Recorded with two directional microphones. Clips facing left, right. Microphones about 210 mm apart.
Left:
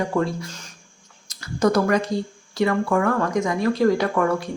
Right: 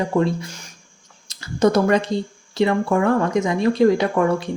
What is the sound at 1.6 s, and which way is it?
Speech, 25° right (ahead or behind).